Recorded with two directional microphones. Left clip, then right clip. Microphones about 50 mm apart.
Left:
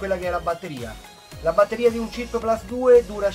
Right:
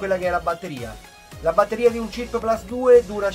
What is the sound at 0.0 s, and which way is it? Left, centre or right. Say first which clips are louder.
Speech: right 3 dB; right.